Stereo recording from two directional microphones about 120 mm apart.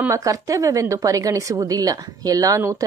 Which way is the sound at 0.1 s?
30° right (ahead or behind).